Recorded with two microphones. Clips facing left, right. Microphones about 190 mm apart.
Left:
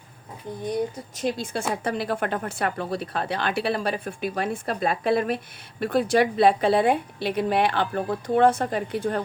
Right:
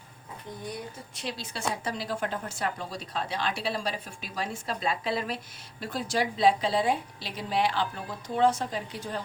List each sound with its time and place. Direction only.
1.1 s a woman's voice: 50° left (ahead or behind)